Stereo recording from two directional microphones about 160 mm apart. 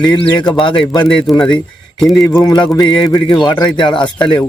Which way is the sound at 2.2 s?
20° left (ahead or behind).